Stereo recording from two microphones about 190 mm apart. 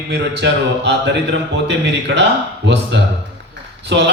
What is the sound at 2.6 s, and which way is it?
Speech, 70° right (ahead or behind).